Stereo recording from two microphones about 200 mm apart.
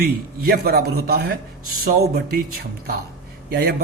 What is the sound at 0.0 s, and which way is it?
Speech, 50° right (ahead or behind).